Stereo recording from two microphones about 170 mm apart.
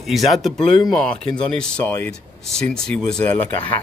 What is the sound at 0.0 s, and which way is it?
Speech, centre (ahead or behind).